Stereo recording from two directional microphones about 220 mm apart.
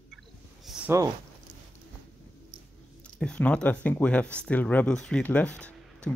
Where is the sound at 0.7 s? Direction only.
Centre (ahead or behind).